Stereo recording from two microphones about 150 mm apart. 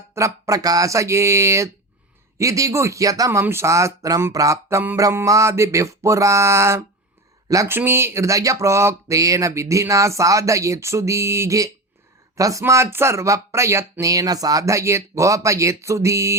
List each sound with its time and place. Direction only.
0.1 s speech: 20° right (ahead or behind)